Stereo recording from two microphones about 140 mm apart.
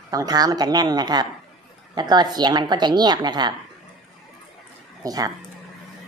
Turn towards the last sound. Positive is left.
turn(degrees=-25)  # may be behind; listen again after turning